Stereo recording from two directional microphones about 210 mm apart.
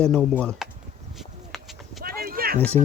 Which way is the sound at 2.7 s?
10° left (ahead or behind).